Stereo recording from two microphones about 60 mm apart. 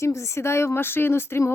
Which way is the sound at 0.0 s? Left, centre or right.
Left.